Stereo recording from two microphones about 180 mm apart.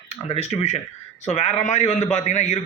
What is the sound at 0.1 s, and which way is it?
A man's voice, 35° left (ahead or behind).